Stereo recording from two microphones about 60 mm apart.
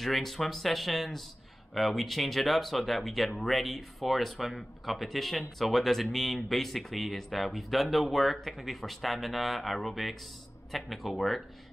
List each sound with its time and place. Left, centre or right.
0.0 s speech: centre